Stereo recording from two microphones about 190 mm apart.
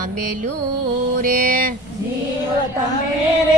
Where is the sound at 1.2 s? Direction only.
45° right (ahead or behind).